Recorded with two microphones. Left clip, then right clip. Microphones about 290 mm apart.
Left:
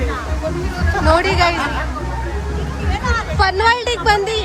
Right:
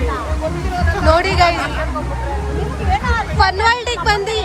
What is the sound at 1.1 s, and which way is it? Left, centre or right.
Speech, centre.